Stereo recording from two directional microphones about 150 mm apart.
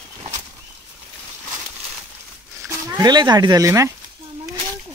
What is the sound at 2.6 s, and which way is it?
Speech, 20° right (ahead or behind).